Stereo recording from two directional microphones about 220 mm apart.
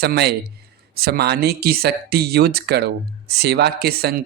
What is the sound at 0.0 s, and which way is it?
Speech, 45° right (ahead or behind).